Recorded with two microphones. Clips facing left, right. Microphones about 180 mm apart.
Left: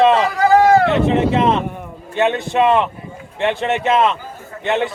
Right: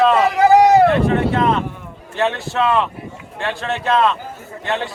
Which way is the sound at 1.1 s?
25° left (ahead or behind).